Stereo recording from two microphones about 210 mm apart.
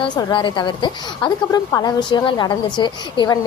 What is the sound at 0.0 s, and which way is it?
A woman's voice, 20° left (ahead or behind).